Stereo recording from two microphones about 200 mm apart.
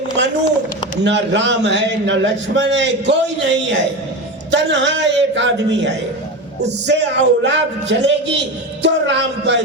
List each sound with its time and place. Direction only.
1.0 s a man's voice: 60° right (ahead or behind)